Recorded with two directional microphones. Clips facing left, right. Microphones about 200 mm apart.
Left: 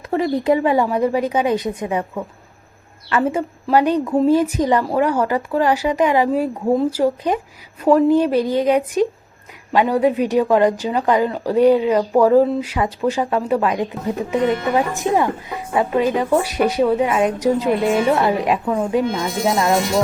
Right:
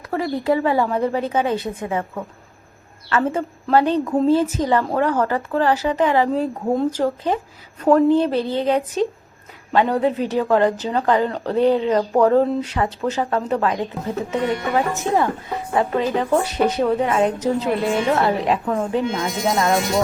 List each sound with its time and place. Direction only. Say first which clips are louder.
0.1 s speech: left 3 dB; 20° left (ahead or behind)
3.1 s speech: left 2 dB; 15° left (ahead or behind)